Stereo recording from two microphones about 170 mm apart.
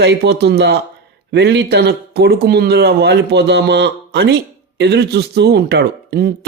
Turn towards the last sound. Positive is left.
turn(degrees=-70)  # may be behind; listen again after turning